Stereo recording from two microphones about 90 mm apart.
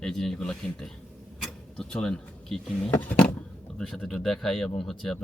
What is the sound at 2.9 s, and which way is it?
Speech, 20° left (ahead or behind).